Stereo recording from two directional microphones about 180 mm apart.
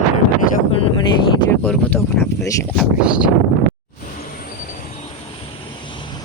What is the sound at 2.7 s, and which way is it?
Speech, 5° right (ahead or behind).